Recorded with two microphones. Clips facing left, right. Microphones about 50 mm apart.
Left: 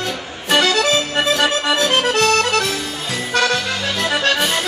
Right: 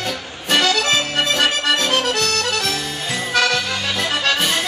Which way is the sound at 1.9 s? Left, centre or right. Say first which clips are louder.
Left 4 dB; left.